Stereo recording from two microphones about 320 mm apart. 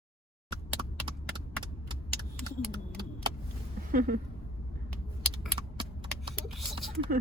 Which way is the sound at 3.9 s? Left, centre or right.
Right.